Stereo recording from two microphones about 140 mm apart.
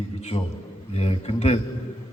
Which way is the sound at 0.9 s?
50° left (ahead or behind).